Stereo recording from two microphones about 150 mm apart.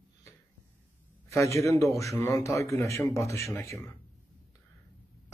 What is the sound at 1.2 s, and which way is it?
Speech, 20° left (ahead or behind).